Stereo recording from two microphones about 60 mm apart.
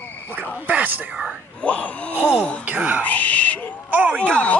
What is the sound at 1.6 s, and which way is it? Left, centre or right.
Wail, left.